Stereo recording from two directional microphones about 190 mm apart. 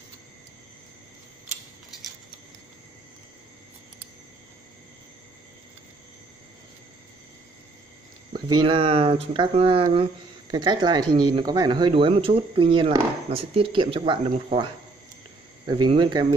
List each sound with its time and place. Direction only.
8.5 s speech: 25° right (ahead or behind)